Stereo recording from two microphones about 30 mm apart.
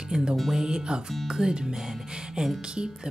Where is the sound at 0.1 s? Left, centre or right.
Right.